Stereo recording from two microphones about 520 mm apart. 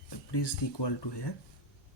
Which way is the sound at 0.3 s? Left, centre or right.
Left.